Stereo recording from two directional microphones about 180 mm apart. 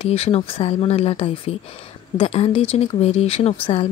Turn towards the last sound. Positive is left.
turn(degrees=35)  # may be behind; listen again after turning